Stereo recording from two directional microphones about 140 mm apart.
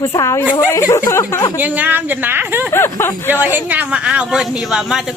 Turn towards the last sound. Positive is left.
turn(degrees=-5)  # may be behind; listen again after turning